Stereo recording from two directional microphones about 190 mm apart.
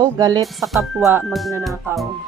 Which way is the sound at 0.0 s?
20° right (ahead or behind).